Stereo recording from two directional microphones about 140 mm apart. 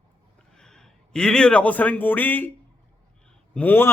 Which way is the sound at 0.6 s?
5° left (ahead or behind).